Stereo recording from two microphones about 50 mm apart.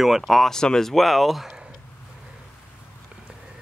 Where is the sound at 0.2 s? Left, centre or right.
Centre.